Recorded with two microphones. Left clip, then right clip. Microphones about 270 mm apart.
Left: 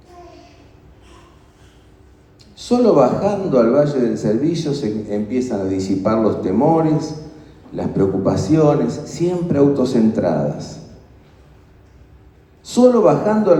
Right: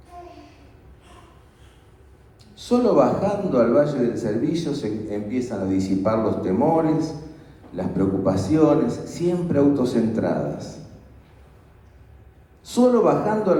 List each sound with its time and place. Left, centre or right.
2.6 s a man's voice: left
12.6 s a man's voice: left